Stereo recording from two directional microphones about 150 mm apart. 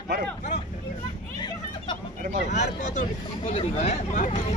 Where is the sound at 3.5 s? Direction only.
40° left (ahead or behind).